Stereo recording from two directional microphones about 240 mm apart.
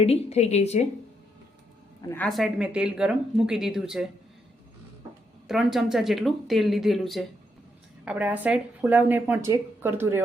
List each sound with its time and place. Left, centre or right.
0.0 s a woman's voice: left
2.0 s speech: centre
5.5 s speech: centre